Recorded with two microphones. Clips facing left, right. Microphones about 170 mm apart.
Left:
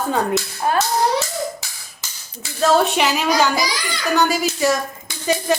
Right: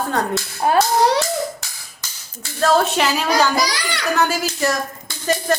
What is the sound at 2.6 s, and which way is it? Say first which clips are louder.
A woman's voice: left 1 dB; centre (ahead or behind).